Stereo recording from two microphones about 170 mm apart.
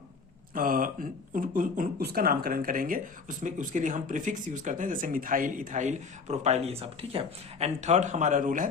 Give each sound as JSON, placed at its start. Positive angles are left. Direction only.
{"t": 0.5, "sound": "speech", "side_deg": -55}